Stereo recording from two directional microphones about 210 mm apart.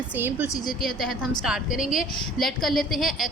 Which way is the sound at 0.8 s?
Centre (ahead or behind).